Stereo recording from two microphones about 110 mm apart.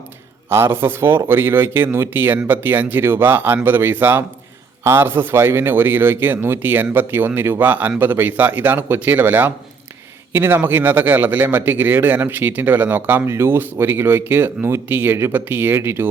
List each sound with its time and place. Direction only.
0.5 s speech: 20° right (ahead or behind)